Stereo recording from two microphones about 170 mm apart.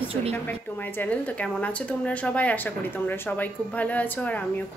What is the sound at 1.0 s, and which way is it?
Speech, 10° left (ahead or behind).